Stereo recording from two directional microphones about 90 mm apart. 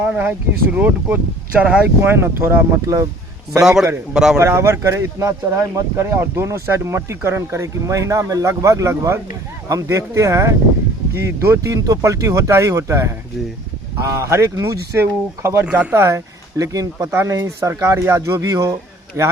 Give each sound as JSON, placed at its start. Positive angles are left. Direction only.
{"t": 0.2, "sound": "speech", "side_deg": -20}
{"t": 2.1, "sound": "speech", "side_deg": -25}
{"t": 3.6, "sound": "a man's voice", "side_deg": -5}
{"t": 4.4, "sound": "speech", "side_deg": -30}
{"t": 15.6, "sound": "speech", "side_deg": -15}
{"t": 16.0, "sound": "speech", "side_deg": -35}